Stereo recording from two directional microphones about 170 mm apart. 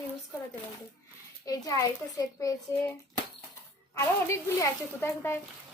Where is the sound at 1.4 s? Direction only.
20° left (ahead or behind).